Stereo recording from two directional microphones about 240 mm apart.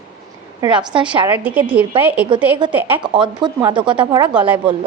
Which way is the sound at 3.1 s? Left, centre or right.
Centre.